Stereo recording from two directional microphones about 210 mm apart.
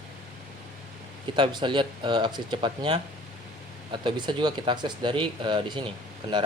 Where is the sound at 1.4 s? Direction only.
20° right (ahead or behind).